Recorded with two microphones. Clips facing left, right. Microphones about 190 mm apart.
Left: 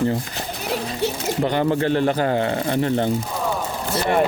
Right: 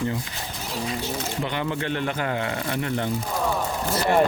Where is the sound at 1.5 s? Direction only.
40° left (ahead or behind).